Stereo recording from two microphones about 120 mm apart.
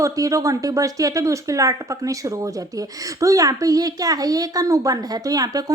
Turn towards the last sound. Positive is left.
turn(degrees=-30)  # may be behind; listen again after turning